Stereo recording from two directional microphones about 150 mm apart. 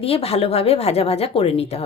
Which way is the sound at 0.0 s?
40° left (ahead or behind).